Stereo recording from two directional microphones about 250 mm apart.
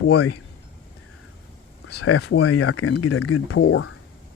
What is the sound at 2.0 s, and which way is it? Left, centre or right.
Speech, left.